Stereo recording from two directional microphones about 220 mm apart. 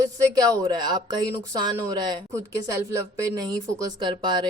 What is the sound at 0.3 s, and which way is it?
Speech, 15° right (ahead or behind).